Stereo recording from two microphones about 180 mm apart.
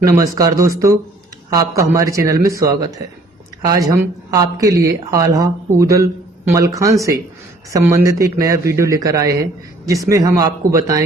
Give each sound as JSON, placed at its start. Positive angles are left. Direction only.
{"t": 0.0, "sound": "speech", "side_deg": -20}